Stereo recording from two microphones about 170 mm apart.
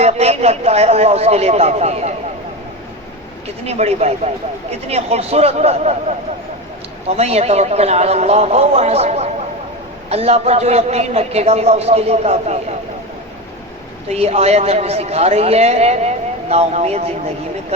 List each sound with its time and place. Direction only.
0.0 s a man's voice: 40° right (ahead or behind)
3.7 s a man's voice: 40° right (ahead or behind)
7.2 s a man's voice: 40° right (ahead or behind)
14.1 s a man's voice: 40° right (ahead or behind)